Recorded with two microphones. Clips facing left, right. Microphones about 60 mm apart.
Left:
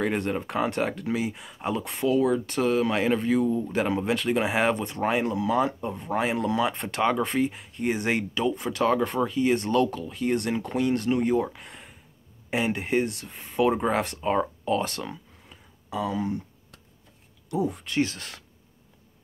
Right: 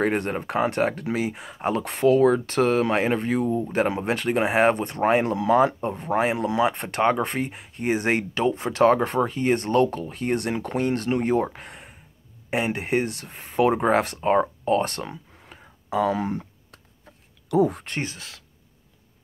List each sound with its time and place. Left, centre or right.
0.0 s speech: right
6.3 s speech: right
12.4 s speech: right
15.4 s a sound: right
16.2 s speech: right
17.6 s speech: right
18.1 s speech: centre